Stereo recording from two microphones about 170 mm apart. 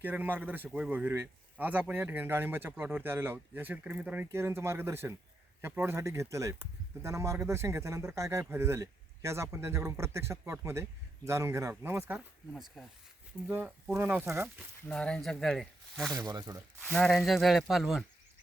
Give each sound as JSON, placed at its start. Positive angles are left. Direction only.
{"t": 0.0, "sound": "speech", "side_deg": -10}
{"t": 14.8, "sound": "speech", "side_deg": 5}
{"t": 16.1, "sound": "speech", "side_deg": -20}
{"t": 16.8, "sound": "speech", "side_deg": 0}